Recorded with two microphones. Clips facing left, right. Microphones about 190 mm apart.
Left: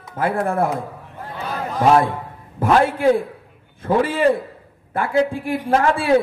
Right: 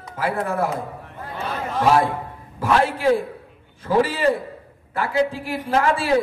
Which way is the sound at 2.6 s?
50° left (ahead or behind).